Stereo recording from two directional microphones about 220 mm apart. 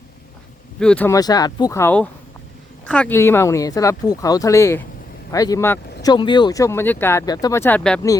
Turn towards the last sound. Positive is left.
turn(degrees=5)  # may be behind; listen again after turning